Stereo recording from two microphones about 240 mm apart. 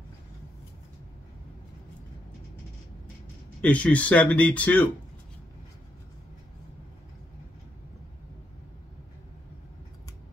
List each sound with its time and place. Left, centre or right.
3.6 s speech: centre